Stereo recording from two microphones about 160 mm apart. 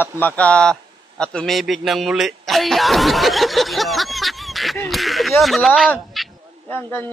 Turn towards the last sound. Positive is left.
turn(degrees=10)  # may be behind; listen again after turning